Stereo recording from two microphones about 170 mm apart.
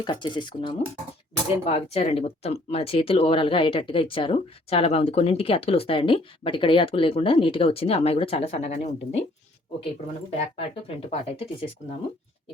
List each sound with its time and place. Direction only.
0.0 s speech: 25° left (ahead or behind)
10.3 s speech: 35° left (ahead or behind)